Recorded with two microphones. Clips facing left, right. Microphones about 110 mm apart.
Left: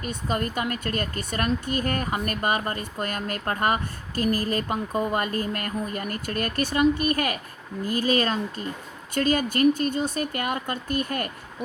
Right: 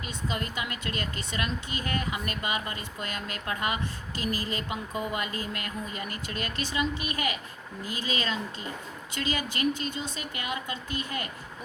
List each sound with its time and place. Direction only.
0.0 s speech: 50° left (ahead or behind)